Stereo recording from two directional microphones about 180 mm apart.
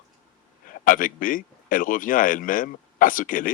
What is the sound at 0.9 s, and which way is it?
Speech, 50° left (ahead or behind).